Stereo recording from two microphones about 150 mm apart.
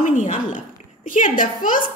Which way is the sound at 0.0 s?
55° left (ahead or behind).